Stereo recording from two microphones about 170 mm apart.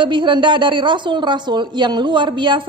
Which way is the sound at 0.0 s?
30° right (ahead or behind).